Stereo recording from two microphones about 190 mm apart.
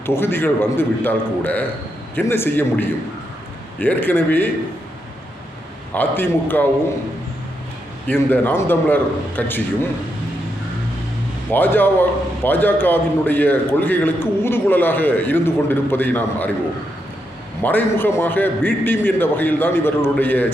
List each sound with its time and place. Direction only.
0.0 s a man's voice: 10° left (ahead or behind)
5.9 s a man's voice: 10° left (ahead or behind)
8.0 s a man's voice: 10° left (ahead or behind)
11.5 s a man's voice: 10° left (ahead or behind)
17.6 s a man's voice: 10° left (ahead or behind)